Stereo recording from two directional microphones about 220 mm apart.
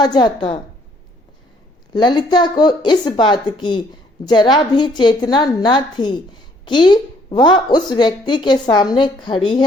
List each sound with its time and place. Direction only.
0.0 s a woman's voice: 20° left (ahead or behind)
1.9 s a woman's voice: 20° left (ahead or behind)